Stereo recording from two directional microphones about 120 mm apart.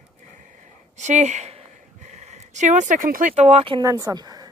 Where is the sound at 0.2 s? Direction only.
90° right.